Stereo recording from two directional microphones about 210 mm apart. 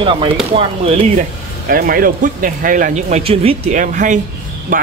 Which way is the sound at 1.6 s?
45° right (ahead or behind).